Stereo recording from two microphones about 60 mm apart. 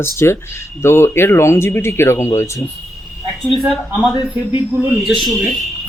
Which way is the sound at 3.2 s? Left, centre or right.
Centre.